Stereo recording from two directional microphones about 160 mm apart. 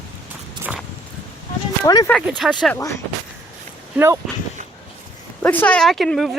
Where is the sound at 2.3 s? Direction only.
Centre (ahead or behind).